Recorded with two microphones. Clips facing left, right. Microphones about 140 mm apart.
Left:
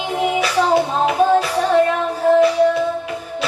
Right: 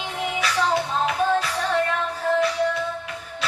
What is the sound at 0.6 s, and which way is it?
Music, 25° left (ahead or behind).